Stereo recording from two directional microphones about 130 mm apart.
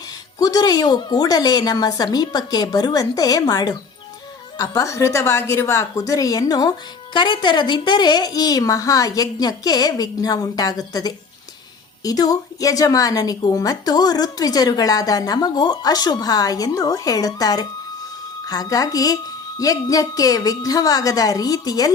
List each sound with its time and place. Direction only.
0.3 s a woman's voice: 30° left (ahead or behind)